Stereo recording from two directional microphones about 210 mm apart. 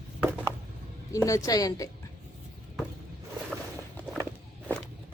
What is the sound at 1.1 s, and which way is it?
Speech, 15° left (ahead or behind).